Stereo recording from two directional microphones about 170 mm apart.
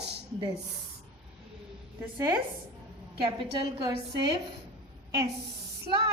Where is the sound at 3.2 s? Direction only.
30° right (ahead or behind).